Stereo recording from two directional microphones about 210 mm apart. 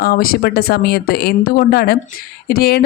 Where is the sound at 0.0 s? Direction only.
45° left (ahead or behind).